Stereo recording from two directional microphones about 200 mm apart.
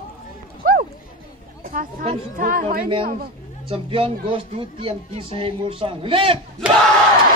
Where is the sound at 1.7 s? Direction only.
40° right (ahead or behind).